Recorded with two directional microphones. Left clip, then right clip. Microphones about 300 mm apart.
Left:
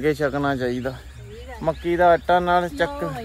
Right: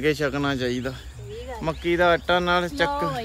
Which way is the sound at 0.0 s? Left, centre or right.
Centre.